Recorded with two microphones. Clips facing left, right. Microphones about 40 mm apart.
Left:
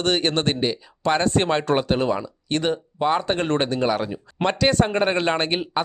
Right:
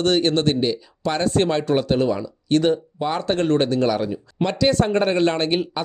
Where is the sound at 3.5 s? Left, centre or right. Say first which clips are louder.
Right 4 dB; left.